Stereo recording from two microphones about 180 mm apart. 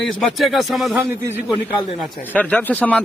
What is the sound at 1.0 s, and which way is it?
Speech, 15° right (ahead or behind).